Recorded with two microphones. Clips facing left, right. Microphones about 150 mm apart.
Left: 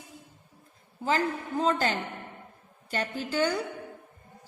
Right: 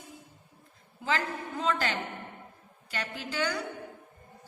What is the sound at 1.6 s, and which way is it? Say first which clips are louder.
A woman's voice: left 3 dB; 40° left (ahead or behind).